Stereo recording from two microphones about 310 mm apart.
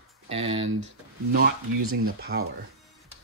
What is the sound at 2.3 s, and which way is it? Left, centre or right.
Speech, right.